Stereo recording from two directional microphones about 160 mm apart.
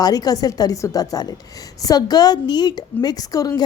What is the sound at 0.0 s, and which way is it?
A woman's voice, 25° left (ahead or behind).